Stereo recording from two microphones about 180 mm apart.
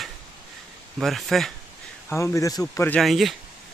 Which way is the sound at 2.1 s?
15° left (ahead or behind).